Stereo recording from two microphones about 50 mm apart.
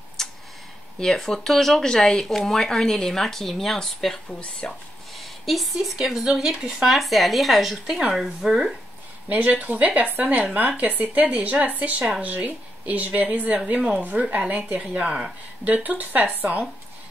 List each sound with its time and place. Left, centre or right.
0.2 s tick-tock: centre
0.9 s speech: centre
4.4 s speech: left
5.1 s a sound: centre
5.9 s speech: centre
7.0 s speech: centre
9.3 s a woman's voice: right
13.7 s a woman's voice: right